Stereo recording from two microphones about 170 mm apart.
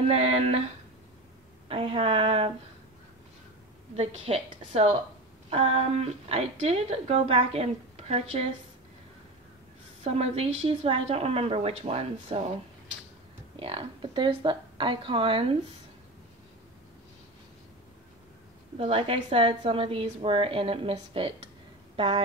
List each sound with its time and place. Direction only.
0.1 s a woman's voice: 35° right (ahead or behind)
1.7 s a woman's voice: 35° right (ahead or behind)
3.9 s a woman's voice: 40° right (ahead or behind)
10.0 s a woman's voice: 35° right (ahead or behind)
13.6 s a woman's voice: 30° right (ahead or behind)
18.8 s a woman's voice: 35° right (ahead or behind)